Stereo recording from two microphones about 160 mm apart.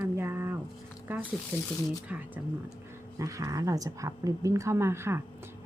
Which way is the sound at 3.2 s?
20° right (ahead or behind).